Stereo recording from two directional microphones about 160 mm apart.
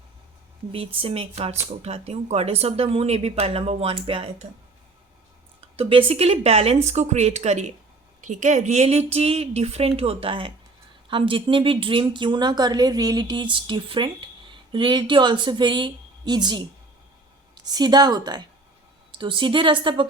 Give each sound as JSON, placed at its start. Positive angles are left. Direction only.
{"t": 0.7, "sound": "speech", "side_deg": -35}
{"t": 5.5, "sound": "a woman's voice", "side_deg": -35}
{"t": 17.7, "sound": "a woman's voice", "side_deg": -25}